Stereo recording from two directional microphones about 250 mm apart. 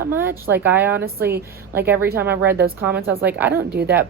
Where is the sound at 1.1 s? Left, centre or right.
Right.